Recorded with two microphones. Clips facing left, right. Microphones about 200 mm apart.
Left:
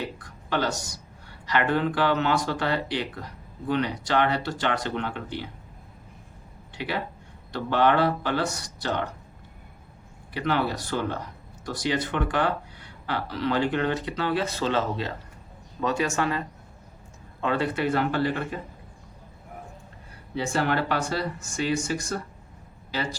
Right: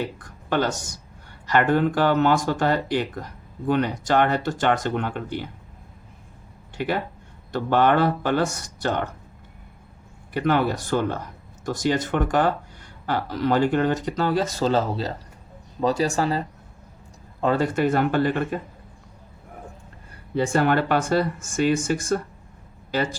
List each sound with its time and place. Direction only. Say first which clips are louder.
0.5 s speech: right 4 dB; 50° right (ahead or behind)
7.5 s speech: right 3 dB; 50° right (ahead or behind)
10.3 s speech: right 5 dB; 50° right (ahead or behind)
17.4 s speech: right 4 dB; 40° right (ahead or behind)
20.3 s speech: right 5 dB; 55° right (ahead or behind)